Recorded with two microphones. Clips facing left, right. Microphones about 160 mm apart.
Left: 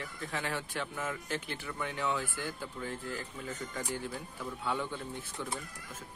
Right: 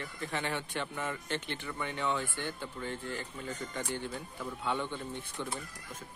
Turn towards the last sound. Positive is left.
turn(degrees=5)  # may be behind; listen again after turning